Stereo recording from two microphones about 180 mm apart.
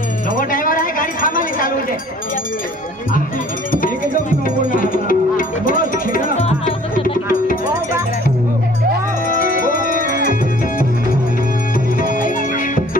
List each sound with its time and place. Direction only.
0.4 s a sound: 50° left (ahead or behind)
4.6 s music: 50° left (ahead or behind)
9.3 s music: 50° left (ahead or behind)
12.1 s music: 50° left (ahead or behind)